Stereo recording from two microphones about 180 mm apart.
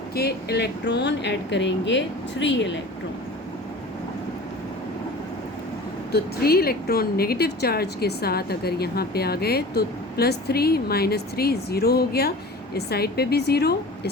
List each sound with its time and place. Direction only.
0.2 s speech: 60° left (ahead or behind); by 2.7 s 80° left
6.1 s a woman's voice: 60° left (ahead or behind)